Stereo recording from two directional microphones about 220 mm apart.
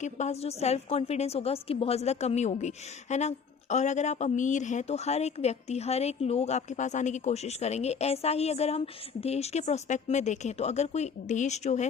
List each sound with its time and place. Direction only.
0.0 s a woman's voice: 30° left (ahead or behind)